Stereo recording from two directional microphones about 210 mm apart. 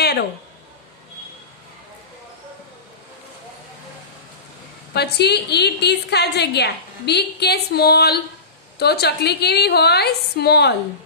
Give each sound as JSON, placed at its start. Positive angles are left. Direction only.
{"t": 4.9, "sound": "a woman's voice", "side_deg": 50}